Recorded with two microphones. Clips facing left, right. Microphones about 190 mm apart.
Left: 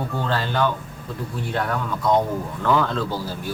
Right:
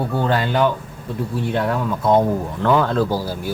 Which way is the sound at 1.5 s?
25° right (ahead or behind).